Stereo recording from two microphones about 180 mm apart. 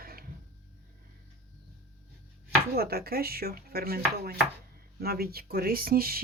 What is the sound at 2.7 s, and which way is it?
Chopping, 60° right (ahead or behind).